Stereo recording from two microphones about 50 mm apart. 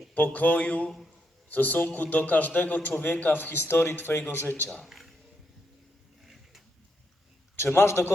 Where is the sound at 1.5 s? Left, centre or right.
Left.